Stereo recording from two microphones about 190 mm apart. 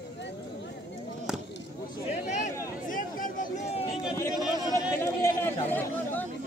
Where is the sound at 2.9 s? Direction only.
45° left (ahead or behind).